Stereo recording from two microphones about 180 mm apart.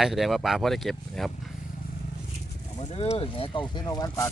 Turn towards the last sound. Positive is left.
turn(degrees=20)  # may be behind; listen again after turning